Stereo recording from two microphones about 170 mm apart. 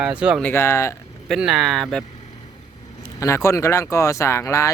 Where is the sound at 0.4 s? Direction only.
15° left (ahead or behind).